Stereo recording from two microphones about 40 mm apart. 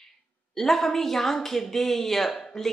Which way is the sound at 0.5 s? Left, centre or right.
Centre.